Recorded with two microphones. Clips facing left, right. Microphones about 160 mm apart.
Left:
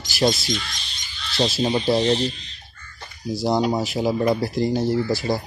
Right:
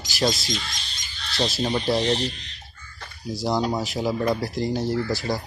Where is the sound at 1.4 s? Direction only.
20° left (ahead or behind).